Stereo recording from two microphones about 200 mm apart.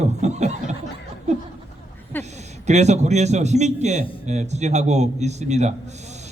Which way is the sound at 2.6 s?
35° right (ahead or behind).